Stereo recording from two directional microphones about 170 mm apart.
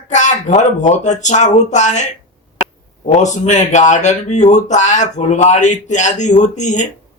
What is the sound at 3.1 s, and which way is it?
Speech, 45° left (ahead or behind).